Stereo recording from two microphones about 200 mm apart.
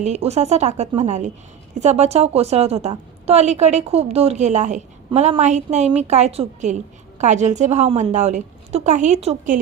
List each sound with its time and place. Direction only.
0.0 s a woman's voice: 35° right (ahead or behind)